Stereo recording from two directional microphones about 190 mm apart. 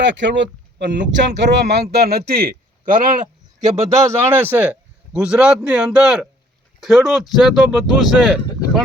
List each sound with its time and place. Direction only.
0.0 s a man's voice: 70° right (ahead or behind); by 3.1 s 45° right (ahead or behind)
3.6 s a man's voice: 20° right (ahead or behind); by 8.8 s centre (ahead or behind)